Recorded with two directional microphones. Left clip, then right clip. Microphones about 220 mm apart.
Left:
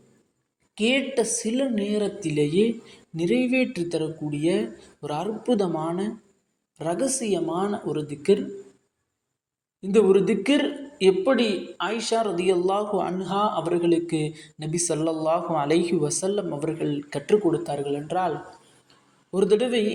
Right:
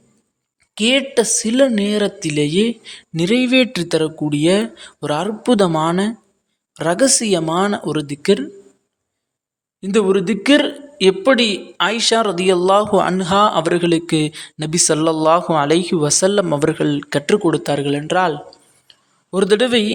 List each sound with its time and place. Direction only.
0.8 s a man's voice: 35° right (ahead or behind)
9.8 s a man's voice: 35° right (ahead or behind)